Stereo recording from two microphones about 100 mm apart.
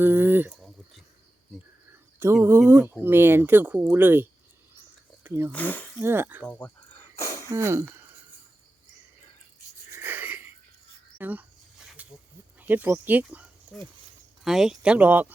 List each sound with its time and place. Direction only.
0.0 s a sound: 20° right (ahead or behind)
2.1 s speech: 25° right (ahead or behind)
5.2 s a sound: 25° right (ahead or behind)
5.5 s speech: 15° left (ahead or behind)
6.0 s speech: 25° right (ahead or behind)
6.4 s speech: 15° left (ahead or behind)
7.2 s wheeze: 35° left (ahead or behind)
7.5 s speech: 25° right (ahead or behind)
9.9 s a sound: 20° right (ahead or behind)
11.2 s speech: 15° right (ahead or behind)
12.0 s a sound: 15° right (ahead or behind)
12.5 s speech: 20° right (ahead or behind)
13.7 s speech: 5° left (ahead or behind); by 15.3 s 15° right (ahead or behind)